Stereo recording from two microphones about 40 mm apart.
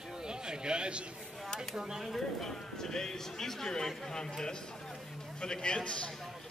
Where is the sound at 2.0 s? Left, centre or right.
Centre.